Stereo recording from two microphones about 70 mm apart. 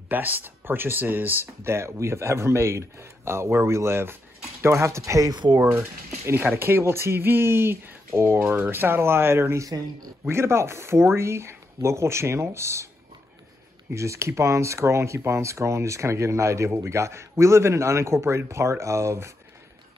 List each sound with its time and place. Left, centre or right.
0.1 s speech: right
6.2 s speech: right
13.9 s speech: right